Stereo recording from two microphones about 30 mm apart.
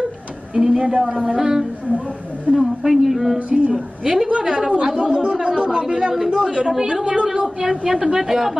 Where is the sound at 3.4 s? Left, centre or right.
Right.